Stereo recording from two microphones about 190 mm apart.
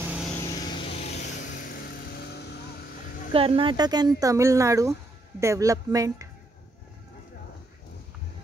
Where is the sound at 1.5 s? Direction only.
50° left (ahead or behind).